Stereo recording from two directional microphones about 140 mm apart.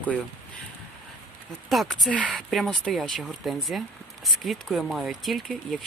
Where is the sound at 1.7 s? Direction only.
Centre (ahead or behind).